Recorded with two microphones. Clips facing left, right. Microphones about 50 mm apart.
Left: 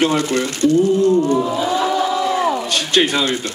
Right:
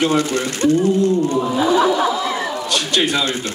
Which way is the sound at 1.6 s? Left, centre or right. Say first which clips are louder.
Right 2 dB; right.